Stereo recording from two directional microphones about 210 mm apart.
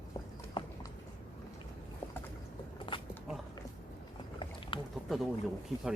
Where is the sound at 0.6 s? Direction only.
25° left (ahead or behind).